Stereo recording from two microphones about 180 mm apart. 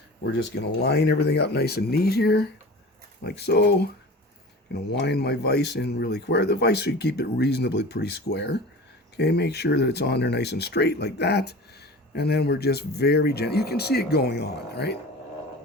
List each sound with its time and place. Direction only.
0.2 s speech: 65° left (ahead or behind)